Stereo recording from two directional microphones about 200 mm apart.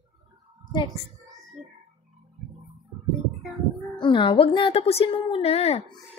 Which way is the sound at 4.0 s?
25° left (ahead or behind).